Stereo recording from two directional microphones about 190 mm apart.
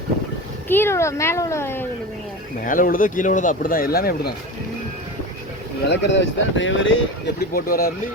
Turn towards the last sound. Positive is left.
turn(degrees=50)  # may be behind; listen again after turning